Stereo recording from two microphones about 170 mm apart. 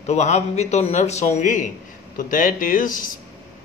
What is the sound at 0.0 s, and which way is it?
A man's voice, 40° left (ahead or behind).